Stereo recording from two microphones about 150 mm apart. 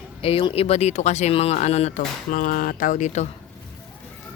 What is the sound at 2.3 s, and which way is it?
Speech, 65° left (ahead or behind).